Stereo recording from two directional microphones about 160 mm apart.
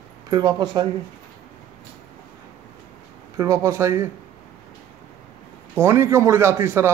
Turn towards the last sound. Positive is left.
turn(degrees=-15)  # may be behind; listen again after turning